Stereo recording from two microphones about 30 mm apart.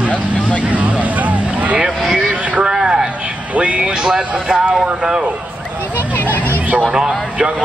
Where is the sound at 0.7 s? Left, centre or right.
Right.